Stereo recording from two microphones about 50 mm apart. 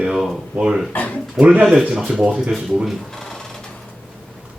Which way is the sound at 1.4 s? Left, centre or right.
Right.